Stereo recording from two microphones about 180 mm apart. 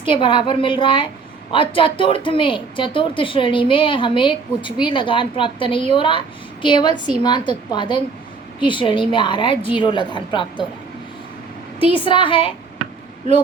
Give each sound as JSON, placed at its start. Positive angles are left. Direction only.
{"t": 0.0, "sound": "a woman's voice", "side_deg": 30}
{"t": 11.9, "sound": "a woman's voice", "side_deg": 30}